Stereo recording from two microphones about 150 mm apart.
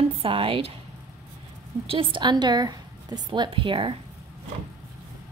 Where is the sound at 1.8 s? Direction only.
35° right (ahead or behind).